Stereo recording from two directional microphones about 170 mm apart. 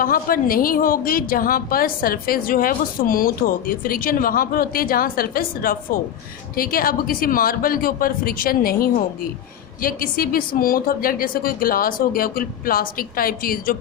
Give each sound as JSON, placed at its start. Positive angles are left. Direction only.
{"t": 0.0, "sound": "a woman's voice", "side_deg": 55}